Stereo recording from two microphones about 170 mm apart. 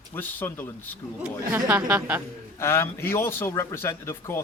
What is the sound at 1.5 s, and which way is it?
Speech, 10° right (ahead or behind).